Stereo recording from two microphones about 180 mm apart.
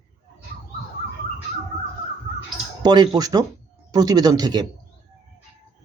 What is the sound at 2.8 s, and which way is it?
Speech, 25° right (ahead or behind).